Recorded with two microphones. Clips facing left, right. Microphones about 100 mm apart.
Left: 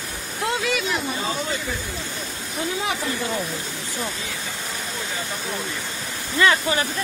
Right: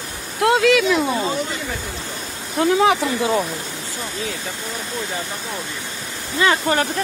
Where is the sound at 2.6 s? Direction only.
90° right.